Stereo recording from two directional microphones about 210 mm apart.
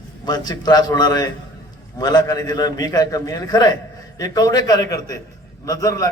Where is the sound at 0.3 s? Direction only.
20° left (ahead or behind).